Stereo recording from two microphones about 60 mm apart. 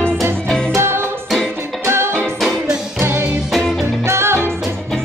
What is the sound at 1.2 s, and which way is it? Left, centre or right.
Music, centre.